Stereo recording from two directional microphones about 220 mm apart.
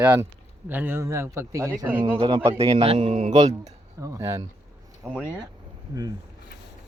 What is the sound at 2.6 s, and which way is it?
A man's voice, 25° right (ahead or behind).